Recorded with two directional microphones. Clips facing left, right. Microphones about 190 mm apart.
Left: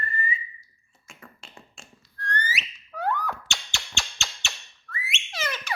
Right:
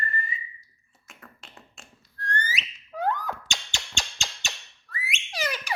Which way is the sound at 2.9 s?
20° right (ahead or behind).